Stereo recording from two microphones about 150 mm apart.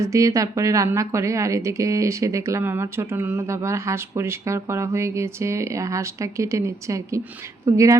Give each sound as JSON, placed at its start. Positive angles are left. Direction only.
{"t": 0.0, "sound": "a woman's voice", "side_deg": -20}